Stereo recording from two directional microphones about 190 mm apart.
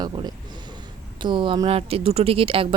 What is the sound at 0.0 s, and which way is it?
Speech, 20° right (ahead or behind).